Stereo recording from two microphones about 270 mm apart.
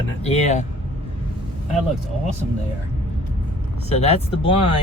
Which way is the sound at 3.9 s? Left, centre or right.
Left.